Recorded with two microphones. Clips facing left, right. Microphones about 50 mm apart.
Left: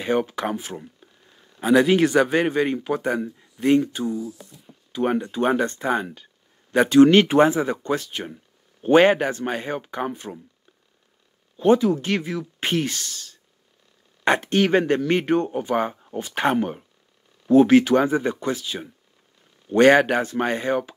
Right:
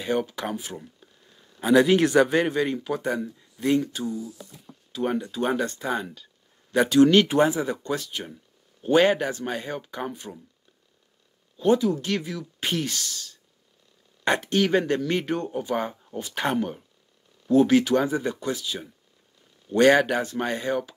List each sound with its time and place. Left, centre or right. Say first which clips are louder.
0.0 s speech: left 4 dB; left
2.6 s speech: left 3 dB; left
11.5 s speech: left 4 dB; left
14.5 s speech: left 2 dB; left